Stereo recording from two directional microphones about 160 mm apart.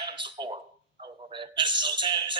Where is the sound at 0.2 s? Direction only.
30° right (ahead or behind).